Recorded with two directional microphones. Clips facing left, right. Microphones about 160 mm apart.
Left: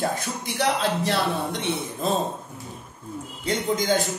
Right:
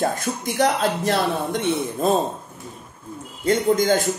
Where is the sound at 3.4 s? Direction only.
50° right (ahead or behind).